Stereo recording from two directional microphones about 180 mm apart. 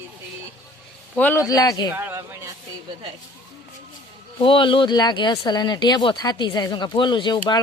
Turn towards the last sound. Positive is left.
turn(degrees=25)  # may be behind; listen again after turning